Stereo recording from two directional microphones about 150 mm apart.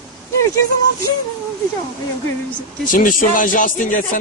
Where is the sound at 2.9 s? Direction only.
65° left (ahead or behind).